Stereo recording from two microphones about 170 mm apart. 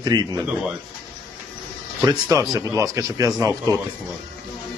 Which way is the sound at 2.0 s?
20° right (ahead or behind).